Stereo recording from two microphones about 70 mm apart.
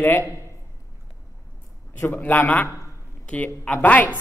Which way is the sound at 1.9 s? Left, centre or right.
Left.